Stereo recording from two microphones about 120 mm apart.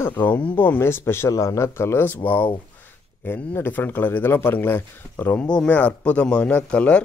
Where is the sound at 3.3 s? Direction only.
20° left (ahead or behind).